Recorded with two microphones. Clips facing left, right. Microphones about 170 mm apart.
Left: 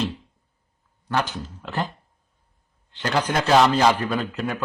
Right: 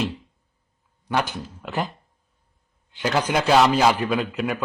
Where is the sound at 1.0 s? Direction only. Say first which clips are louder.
Even; 10° right (ahead or behind).